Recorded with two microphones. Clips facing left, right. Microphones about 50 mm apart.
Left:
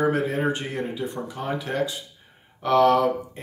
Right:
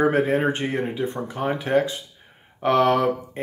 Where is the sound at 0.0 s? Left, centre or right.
Right.